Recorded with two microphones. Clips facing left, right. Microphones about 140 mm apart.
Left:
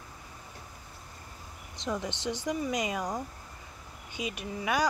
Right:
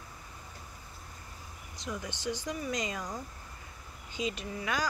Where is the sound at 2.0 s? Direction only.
20° left (ahead or behind).